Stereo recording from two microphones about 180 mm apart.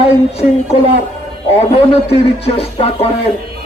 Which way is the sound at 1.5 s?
35° left (ahead or behind).